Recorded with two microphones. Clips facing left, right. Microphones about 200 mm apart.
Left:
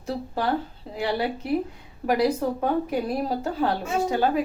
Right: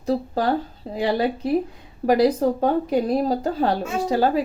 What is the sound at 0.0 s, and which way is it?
Speech, 35° right (ahead or behind).